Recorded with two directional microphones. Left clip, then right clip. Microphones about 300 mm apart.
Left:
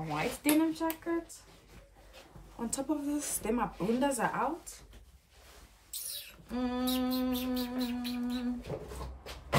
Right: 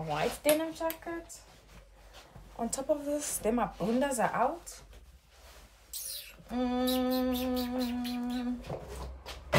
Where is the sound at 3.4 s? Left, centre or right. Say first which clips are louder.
Right 2 dB; centre.